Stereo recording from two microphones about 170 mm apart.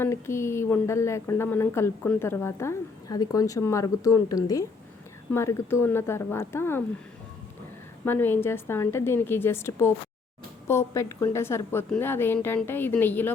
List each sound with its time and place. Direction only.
0.0 s a woman's voice: 15° left (ahead or behind)
8.0 s a woman's voice: 10° left (ahead or behind)